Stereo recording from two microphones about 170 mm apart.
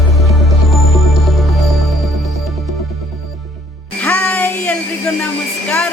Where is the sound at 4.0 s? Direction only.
10° left (ahead or behind).